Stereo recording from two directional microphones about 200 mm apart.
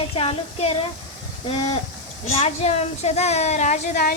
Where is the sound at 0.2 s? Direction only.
30° left (ahead or behind).